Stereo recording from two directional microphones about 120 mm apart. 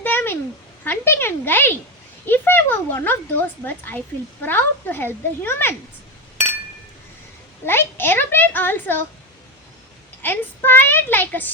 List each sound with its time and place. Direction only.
0.0 s a sound: 15° left (ahead or behind)
0.9 s speech: 20° left (ahead or behind)
7.6 s speech: 20° left (ahead or behind)
10.2 s speech: 15° left (ahead or behind)